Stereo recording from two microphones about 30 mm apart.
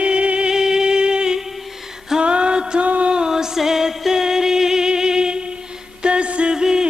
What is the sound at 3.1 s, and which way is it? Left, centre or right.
Music, right.